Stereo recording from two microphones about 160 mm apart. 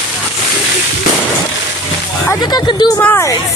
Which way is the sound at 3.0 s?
15° left (ahead or behind).